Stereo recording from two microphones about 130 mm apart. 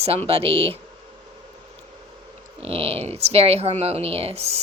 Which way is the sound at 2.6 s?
50° right (ahead or behind).